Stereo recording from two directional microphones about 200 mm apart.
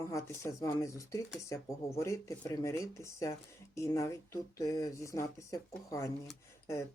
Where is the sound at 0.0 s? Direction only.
15° left (ahead or behind).